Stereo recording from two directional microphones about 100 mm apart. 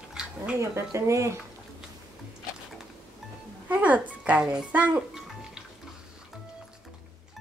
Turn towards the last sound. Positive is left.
turn(degrees=-10)  # may be behind; listen again after turning